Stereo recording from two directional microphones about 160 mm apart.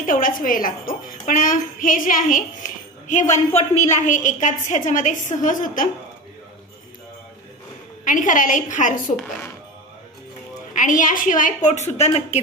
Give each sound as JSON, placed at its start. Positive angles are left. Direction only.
{"t": 0.0, "sound": "a woman's voice", "side_deg": 60}
{"t": 8.0, "sound": "a woman's voice", "side_deg": 55}
{"t": 9.1, "sound": "speech", "side_deg": 10}
{"t": 10.7, "sound": "a woman's voice", "side_deg": 55}